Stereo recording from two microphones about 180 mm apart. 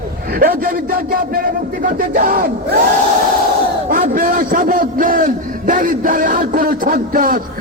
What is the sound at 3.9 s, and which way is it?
A man's voice, 50° right (ahead or behind).